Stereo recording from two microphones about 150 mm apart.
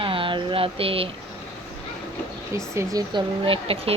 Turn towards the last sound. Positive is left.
turn(degrees=-40)  # may be behind; listen again after turning